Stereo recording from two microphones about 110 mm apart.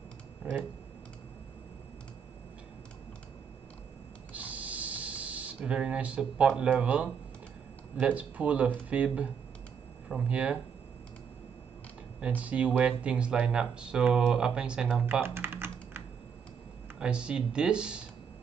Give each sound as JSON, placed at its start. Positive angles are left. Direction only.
{"t": 0.4, "sound": "speech", "side_deg": -10}
{"t": 4.3, "sound": "a sound", "side_deg": -15}
{"t": 8.0, "sound": "speech", "side_deg": -15}
{"t": 12.2, "sound": "speech", "side_deg": -15}
{"t": 15.0, "sound": "typing", "side_deg": -15}
{"t": 17.0, "sound": "speech", "side_deg": -10}